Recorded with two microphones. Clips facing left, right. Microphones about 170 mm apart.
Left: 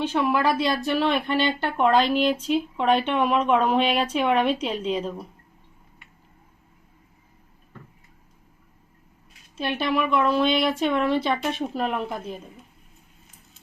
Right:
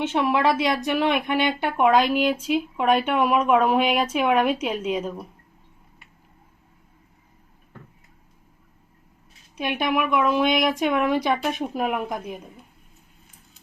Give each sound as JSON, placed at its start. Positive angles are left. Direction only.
{"t": 0.0, "sound": "speech", "side_deg": -20}
{"t": 9.6, "sound": "speech", "side_deg": -15}